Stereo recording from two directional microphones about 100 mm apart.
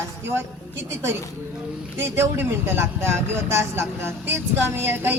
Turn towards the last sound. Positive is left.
turn(degrees=-20)  # may be behind; listen again after turning